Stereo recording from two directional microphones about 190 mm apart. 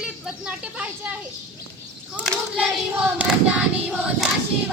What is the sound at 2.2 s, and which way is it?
Child singing, centre (ahead or behind).